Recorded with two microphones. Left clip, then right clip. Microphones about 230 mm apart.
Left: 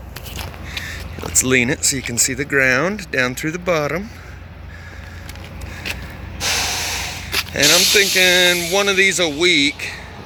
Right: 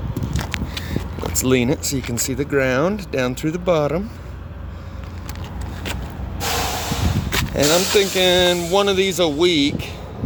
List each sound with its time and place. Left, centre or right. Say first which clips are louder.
0.7 s speech: left 1 dB; centre
6.4 s snort: left 2 dB; right
7.6 s speech: left 4 dB; right
8.2 s speech: left 2 dB; centre